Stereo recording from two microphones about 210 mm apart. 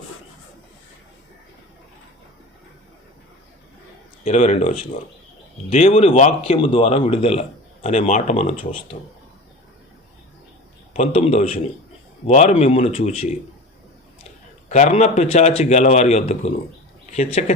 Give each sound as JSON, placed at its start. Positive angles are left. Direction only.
{"t": 4.2, "sound": "a man's voice", "side_deg": 35}
{"t": 5.7, "sound": "speech", "side_deg": 30}
{"t": 10.9, "sound": "speech", "side_deg": 30}
{"t": 14.7, "sound": "a man's voice", "side_deg": 35}